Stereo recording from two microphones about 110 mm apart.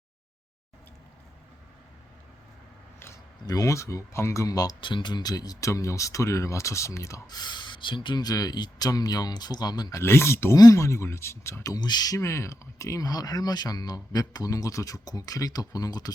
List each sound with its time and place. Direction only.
3.4 s speech: 35° left (ahead or behind)
4.8 s speech: 50° left (ahead or behind); by 7.2 s 25° left (ahead or behind)
7.3 s speech: 40° left (ahead or behind)
10.0 s speech: 25° left (ahead or behind)